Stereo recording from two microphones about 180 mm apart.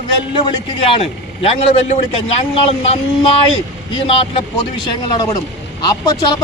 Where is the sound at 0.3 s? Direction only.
30° left (ahead or behind).